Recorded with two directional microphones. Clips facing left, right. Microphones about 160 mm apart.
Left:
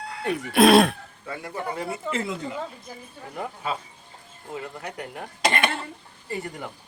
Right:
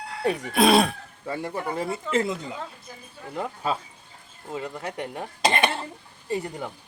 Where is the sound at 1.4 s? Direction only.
30° right (ahead or behind).